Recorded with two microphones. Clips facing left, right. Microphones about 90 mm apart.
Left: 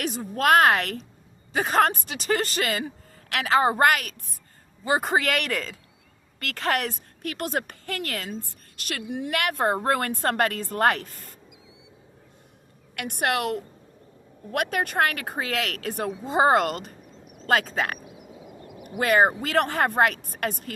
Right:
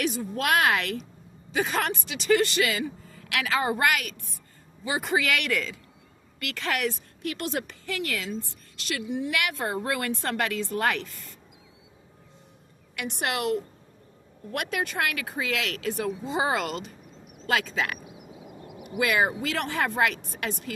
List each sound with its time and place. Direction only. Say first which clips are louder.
0.0 s a woman's voice: left 3 dB; 45° left (ahead or behind)
13.0 s a woman's voice: left 3 dB; 50° left (ahead or behind)
17.9 s a sound: left 1 dB; 5° right (ahead or behind)
18.8 s a woman's voice: left 4 dB; 45° left (ahead or behind)